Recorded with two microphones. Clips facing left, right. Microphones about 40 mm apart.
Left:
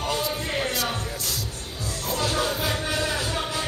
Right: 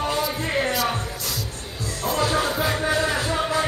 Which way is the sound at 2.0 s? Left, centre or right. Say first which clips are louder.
Right 4 dB; right.